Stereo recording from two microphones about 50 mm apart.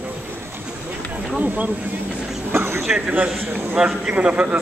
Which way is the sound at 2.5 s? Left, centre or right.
Right.